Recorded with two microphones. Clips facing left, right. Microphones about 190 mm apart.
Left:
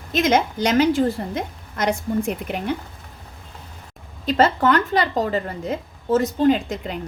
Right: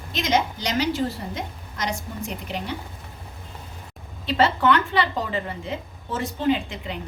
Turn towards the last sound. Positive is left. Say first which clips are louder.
# left 5 dB
turn(degrees=45)  # may be behind; listen again after turning